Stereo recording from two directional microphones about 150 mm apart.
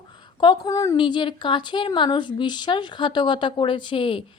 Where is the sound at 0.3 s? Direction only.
30° left (ahead or behind).